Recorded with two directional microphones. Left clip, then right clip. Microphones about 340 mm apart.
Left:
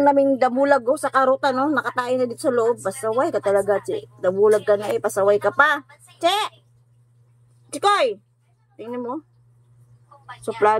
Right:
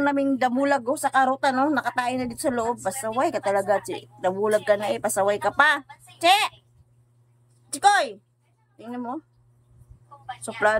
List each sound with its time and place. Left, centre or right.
0.1 s speech: centre
7.7 s speech: centre
10.4 s speech: centre